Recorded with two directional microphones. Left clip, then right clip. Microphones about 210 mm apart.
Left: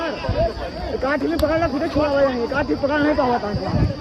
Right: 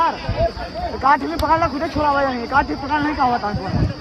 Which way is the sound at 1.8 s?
55° right (ahead or behind).